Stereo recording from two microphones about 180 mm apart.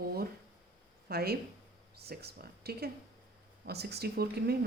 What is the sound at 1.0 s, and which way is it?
Speech, 60° right (ahead or behind).